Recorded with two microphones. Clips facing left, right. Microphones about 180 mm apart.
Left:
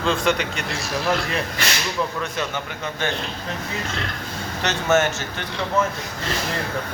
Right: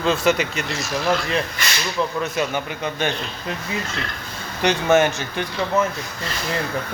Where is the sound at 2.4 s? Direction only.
15° right (ahead or behind).